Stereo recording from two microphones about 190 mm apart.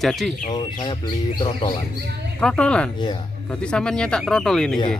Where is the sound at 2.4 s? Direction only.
5° left (ahead or behind).